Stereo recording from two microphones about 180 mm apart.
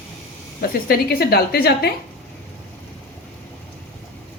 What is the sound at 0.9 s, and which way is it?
A woman's voice, 60° left (ahead or behind).